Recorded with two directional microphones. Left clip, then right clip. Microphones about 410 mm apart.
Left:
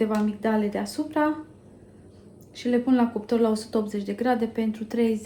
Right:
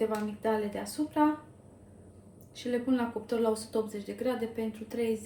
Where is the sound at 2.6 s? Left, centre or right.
Centre.